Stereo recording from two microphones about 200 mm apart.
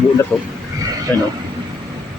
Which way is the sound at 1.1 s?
10° left (ahead or behind).